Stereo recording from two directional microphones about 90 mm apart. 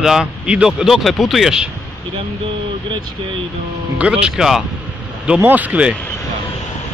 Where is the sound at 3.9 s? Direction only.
10° right (ahead or behind).